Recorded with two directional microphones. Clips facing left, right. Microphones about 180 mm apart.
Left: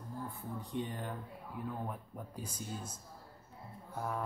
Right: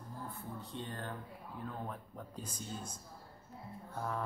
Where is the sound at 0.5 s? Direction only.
15° left (ahead or behind).